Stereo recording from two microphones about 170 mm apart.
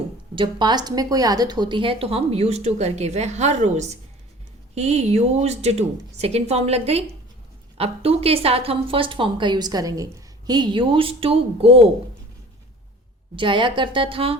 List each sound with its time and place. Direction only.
0.3 s a woman's voice: 25° right (ahead or behind)
13.3 s a woman's voice: 30° right (ahead or behind)